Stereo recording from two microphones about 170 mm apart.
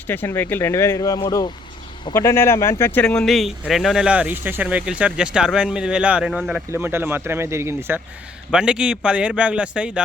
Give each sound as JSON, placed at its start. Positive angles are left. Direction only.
{"t": 0.1, "sound": "speech", "side_deg": 10}